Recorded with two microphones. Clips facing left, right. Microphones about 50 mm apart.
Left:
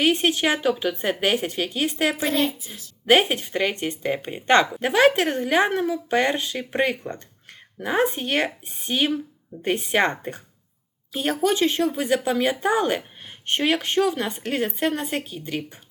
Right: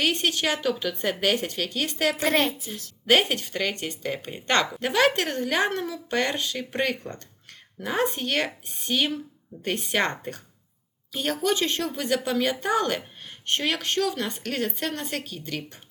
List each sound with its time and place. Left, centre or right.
0.0 s a woman's voice: centre
2.3 s a woman's voice: right
3.1 s a woman's voice: centre